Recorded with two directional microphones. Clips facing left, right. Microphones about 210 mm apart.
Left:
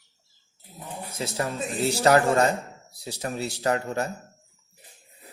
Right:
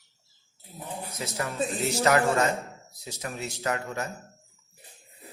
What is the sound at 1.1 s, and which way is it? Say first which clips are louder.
A man's voice: left 5 dB; 30° left (ahead or behind).